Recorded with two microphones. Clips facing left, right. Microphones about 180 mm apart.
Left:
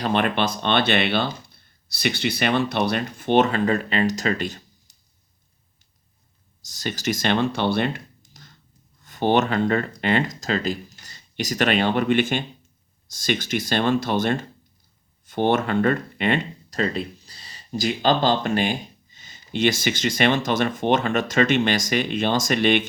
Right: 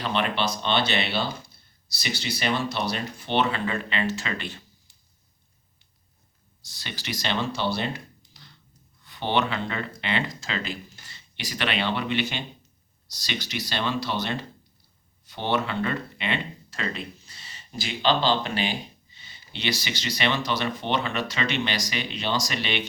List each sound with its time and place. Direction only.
0.0 s speech: 50° left (ahead or behind)
6.6 s speech: 45° left (ahead or behind)